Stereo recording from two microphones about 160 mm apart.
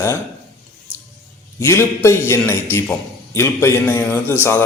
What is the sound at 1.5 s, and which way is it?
A man's voice, 15° left (ahead or behind).